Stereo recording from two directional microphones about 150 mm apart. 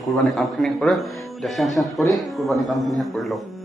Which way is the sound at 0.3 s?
Centre (ahead or behind).